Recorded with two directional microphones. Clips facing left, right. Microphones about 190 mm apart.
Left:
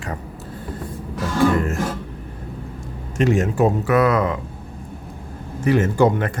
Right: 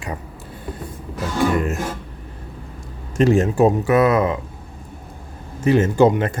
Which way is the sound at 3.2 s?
35° right (ahead or behind).